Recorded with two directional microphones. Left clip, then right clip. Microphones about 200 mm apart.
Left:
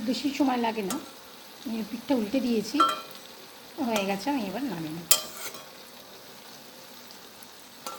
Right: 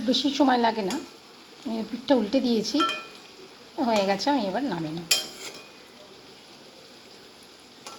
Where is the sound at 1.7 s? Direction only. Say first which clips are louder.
Right 3 dB; 20° right (ahead or behind).